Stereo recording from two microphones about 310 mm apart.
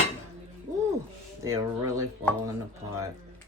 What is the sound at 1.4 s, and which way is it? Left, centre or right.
Speech, centre.